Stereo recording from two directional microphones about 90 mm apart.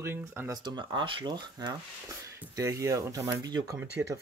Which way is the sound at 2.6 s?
35° right (ahead or behind).